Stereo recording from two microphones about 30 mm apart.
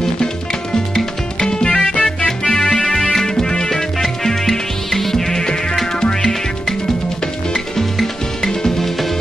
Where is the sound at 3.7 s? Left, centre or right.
Centre.